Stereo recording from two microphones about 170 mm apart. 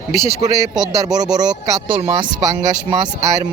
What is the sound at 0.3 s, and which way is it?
Speech, 20° right (ahead or behind).